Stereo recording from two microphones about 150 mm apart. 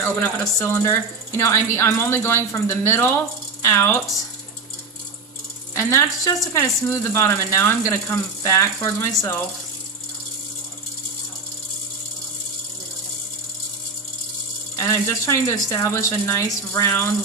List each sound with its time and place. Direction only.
0.0 s speech: 15° left (ahead or behind)
5.7 s speech: 15° left (ahead or behind)
14.8 s speech: 20° left (ahead or behind)